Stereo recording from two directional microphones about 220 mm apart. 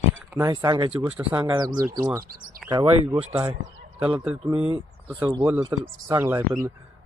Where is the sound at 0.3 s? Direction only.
15° right (ahead or behind).